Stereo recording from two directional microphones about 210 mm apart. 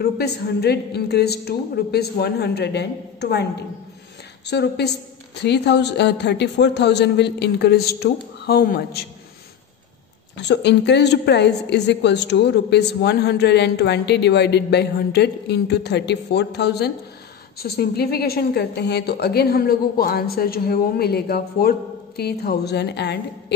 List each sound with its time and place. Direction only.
0.0 s a woman's voice: 50° left (ahead or behind)
4.5 s a woman's voice: 55° left (ahead or behind)
10.3 s a woman's voice: 55° left (ahead or behind)